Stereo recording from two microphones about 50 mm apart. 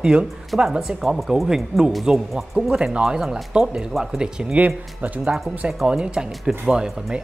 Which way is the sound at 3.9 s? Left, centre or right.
Centre.